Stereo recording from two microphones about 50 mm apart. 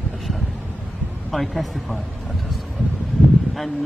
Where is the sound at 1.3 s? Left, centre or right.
Centre.